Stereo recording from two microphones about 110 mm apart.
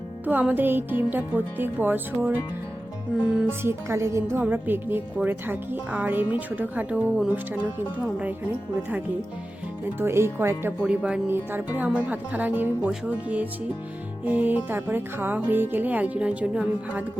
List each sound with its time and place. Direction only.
0.3 s a woman's voice: 15° right (ahead or behind)
3.6 s a woman's voice: 25° right (ahead or behind)
10.0 s speech: 25° right (ahead or behind)
10.8 s a woman's voice: 10° right (ahead or behind)
11.3 s a woman's voice: 20° right (ahead or behind)